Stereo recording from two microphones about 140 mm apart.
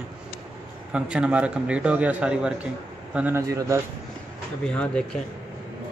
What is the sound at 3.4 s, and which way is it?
Speech, 20° right (ahead or behind).